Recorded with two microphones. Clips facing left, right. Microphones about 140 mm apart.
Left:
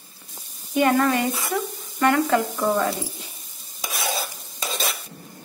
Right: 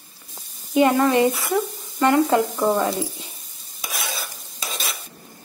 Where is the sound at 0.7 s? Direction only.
20° right (ahead or behind).